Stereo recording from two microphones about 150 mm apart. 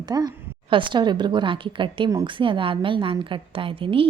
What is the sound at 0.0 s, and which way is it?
A woman's voice, 25° right (ahead or behind).